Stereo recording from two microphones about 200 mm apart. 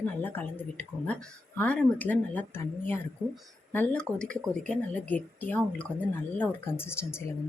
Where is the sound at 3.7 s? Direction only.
10° left (ahead or behind).